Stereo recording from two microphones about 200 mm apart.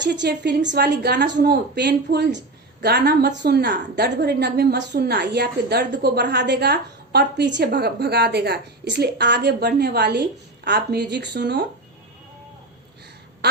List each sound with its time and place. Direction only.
0.0 s a woman's voice: 60° right (ahead or behind)